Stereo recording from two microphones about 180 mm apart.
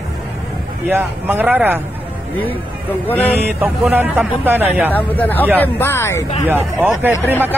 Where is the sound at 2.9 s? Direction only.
10° left (ahead or behind).